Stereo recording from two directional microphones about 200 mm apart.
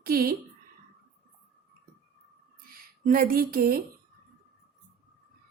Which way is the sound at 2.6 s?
45° right (ahead or behind).